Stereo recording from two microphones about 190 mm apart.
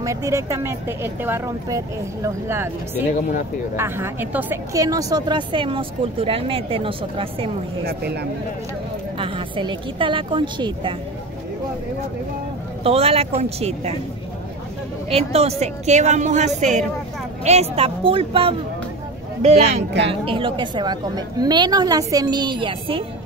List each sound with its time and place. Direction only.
0.0 s speech: 15° right (ahead or behind)
3.7 s speech: 10° right (ahead or behind); by 7.5 s 30° right (ahead or behind)
7.8 s speech: 60° right (ahead or behind)
9.2 s speech: 25° right (ahead or behind)
12.8 s a woman's voice: 30° right (ahead or behind)
15.0 s a woman's voice: 30° right (ahead or behind)